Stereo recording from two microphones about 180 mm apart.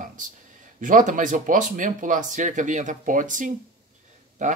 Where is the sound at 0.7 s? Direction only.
45° right (ahead or behind).